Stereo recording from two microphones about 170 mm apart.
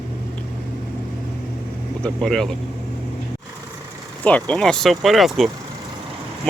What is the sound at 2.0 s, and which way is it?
Speech, 5° left (ahead or behind).